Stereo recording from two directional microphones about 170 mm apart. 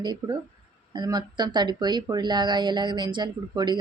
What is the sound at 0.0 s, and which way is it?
Speech, 25° right (ahead or behind).